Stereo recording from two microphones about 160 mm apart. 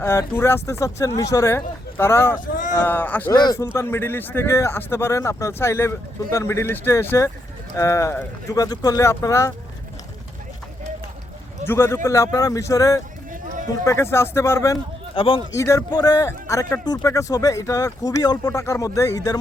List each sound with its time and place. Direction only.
0.0 s speech: 15° left (ahead or behind)
3.3 s speech: 25° left (ahead or behind)
3.8 s speech: 15° left (ahead or behind)
11.6 s speech: 15° left (ahead or behind)
15.1 s a man's voice: 35° left (ahead or behind)
15.5 s speech: 20° left (ahead or behind)